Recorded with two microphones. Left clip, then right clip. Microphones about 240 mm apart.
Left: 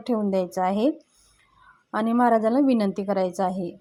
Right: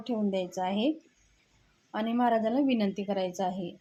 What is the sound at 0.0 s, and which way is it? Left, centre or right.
A woman's voice, left.